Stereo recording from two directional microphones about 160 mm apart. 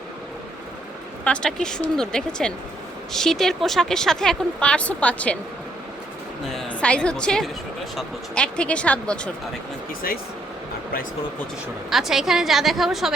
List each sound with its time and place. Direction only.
1.2 s speech: 5° left (ahead or behind)
6.5 s a woman's voice: 5° left (ahead or behind)
11.9 s speech: centre (ahead or behind)